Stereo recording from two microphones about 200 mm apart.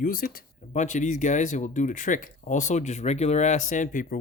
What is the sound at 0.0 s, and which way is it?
Speech, 45° left (ahead or behind).